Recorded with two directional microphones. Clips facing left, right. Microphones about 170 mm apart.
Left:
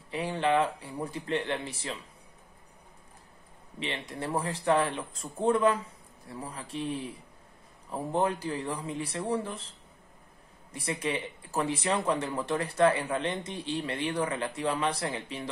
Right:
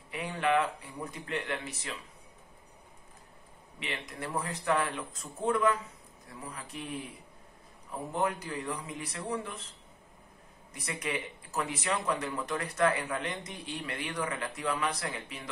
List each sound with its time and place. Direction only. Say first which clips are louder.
0.1 s speech: left 2 dB; 30° left (ahead or behind)
3.8 s speech: left 4 dB; 30° left (ahead or behind)
8.1 s speech: left 4 dB; 30° left (ahead or behind)